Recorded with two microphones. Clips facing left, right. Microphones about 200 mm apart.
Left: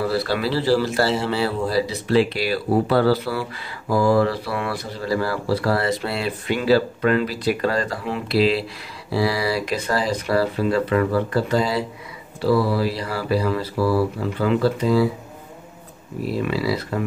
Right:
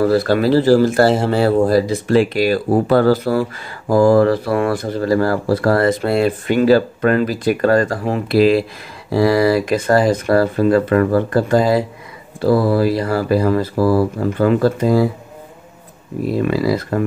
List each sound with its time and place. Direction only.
0.0 s speech: 50° right (ahead or behind)
16.3 s speech: 50° right (ahead or behind)